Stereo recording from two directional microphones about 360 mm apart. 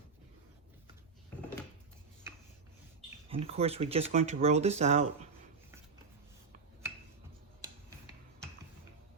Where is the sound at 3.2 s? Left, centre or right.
Centre.